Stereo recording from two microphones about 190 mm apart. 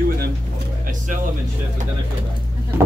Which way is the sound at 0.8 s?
45° right (ahead or behind).